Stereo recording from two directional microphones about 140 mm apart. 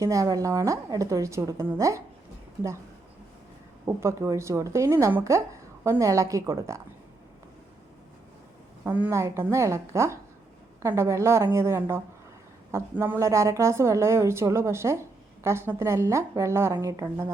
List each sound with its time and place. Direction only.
0.0 s a woman's voice: 25° right (ahead or behind)
3.8 s a woman's voice: 20° right (ahead or behind)
8.8 s a woman's voice: 15° right (ahead or behind)